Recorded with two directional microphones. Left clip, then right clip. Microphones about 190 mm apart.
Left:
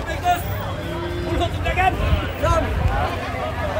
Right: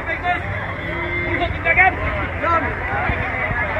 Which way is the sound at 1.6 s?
60° left (ahead or behind).